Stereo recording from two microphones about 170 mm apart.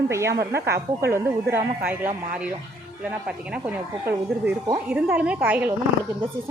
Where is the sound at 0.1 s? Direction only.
15° right (ahead or behind).